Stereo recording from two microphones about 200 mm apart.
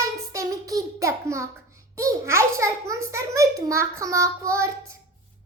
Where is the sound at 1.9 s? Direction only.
15° right (ahead or behind).